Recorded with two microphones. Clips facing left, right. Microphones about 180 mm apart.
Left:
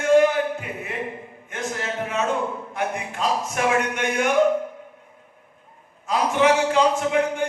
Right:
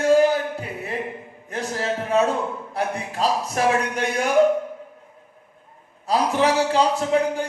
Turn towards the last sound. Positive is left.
turn(degrees=-35)  # may be behind; listen again after turning